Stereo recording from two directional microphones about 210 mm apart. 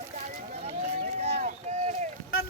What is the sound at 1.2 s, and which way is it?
Boat, 35° right (ahead or behind).